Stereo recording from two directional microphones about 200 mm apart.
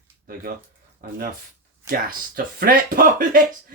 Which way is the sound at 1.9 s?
45° right (ahead or behind).